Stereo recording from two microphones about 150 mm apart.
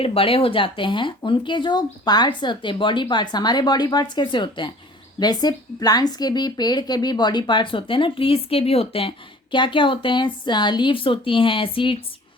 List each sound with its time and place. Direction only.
0.0 s a woman's voice: 40° left (ahead or behind)